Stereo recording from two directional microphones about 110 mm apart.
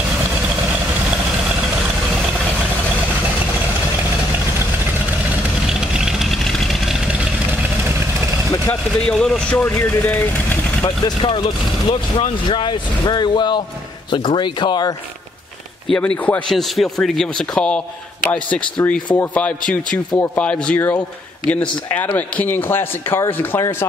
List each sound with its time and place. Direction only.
5.7 s vehicle: 5° right (ahead or behind)
9.0 s a man's voice: 5° left (ahead or behind)
11.1 s speech: 50° left (ahead or behind)
15.9 s a man's voice: 10° left (ahead or behind)